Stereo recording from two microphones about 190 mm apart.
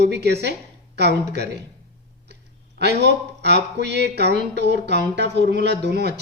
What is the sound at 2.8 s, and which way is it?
Speech, 65° right (ahead or behind).